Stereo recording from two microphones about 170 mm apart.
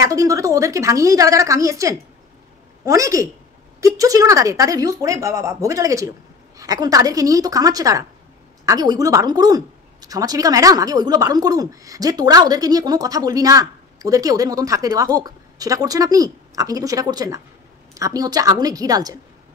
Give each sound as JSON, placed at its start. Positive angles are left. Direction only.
{"t": 0.0, "sound": "a woman's voice", "side_deg": -20}